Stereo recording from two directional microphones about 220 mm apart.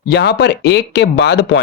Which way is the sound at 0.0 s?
50° left (ahead or behind).